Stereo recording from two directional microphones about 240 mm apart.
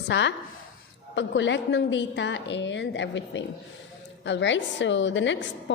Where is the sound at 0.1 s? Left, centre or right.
Left.